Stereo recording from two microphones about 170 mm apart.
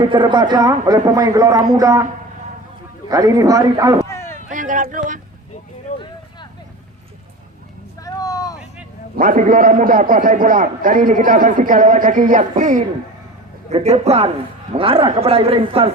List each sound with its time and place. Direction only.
0.0 s a man's voice: 30° right (ahead or behind)
3.1 s a man's voice: 20° right (ahead or behind)
4.1 s a sound: 15° left (ahead or behind)
4.4 s speech: 50° right (ahead or behind)
8.0 s vehicle: 20° left (ahead or behind)
9.1 s a man's voice: 50° right (ahead or behind); by 15.9 s 35° right (ahead or behind)